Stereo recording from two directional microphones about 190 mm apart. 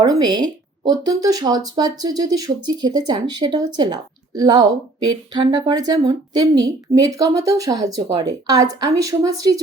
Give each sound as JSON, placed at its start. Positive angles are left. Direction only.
{"t": 0.0, "sound": "speech", "side_deg": -20}